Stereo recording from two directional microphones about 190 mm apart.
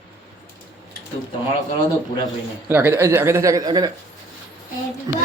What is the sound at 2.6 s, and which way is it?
Speech, 10° right (ahead or behind).